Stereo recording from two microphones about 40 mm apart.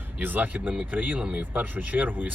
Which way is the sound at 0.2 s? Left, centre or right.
Right.